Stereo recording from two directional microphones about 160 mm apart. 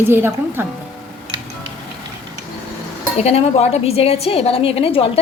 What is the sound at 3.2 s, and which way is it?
A woman's voice, 40° left (ahead or behind).